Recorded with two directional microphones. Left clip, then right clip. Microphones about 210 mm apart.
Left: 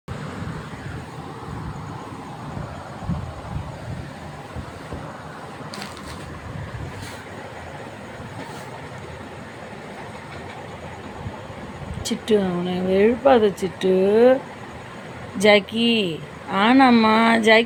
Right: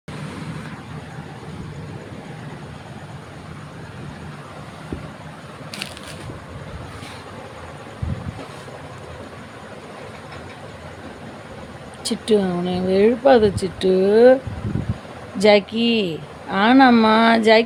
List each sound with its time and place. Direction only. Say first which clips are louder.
12.3 s a woman's voice: right 2 dB; 20° right (ahead or behind)
15.4 s a woman's voice: right 1 dB; 20° right (ahead or behind)